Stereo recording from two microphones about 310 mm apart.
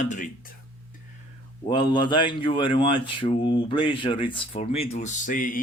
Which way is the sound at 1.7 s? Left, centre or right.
Centre.